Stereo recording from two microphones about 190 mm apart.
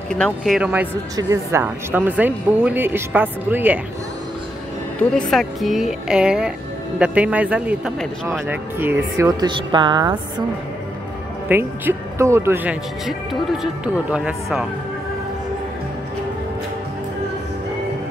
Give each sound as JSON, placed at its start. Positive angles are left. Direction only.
{"t": 0.1, "sound": "speech", "side_deg": 0}
{"t": 4.9, "sound": "a woman's voice", "side_deg": 5}
{"t": 11.4, "sound": "speech", "side_deg": -10}